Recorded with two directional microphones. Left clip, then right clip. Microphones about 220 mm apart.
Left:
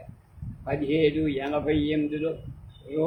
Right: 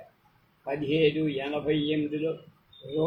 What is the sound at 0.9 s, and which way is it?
Speech, 15° left (ahead or behind).